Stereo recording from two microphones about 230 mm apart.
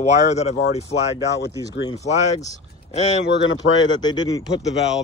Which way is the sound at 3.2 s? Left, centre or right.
Left.